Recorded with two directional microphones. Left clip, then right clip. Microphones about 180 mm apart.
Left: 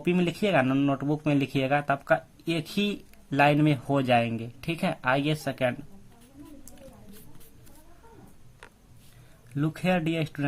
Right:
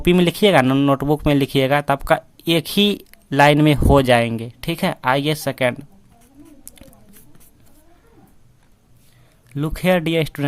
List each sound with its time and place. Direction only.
0.0 s speech: 45° right (ahead or behind)
9.5 s speech: 35° right (ahead or behind)